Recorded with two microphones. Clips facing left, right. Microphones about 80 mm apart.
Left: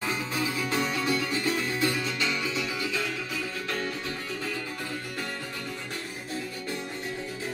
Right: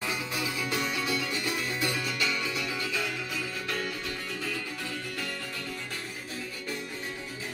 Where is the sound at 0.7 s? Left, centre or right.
Left.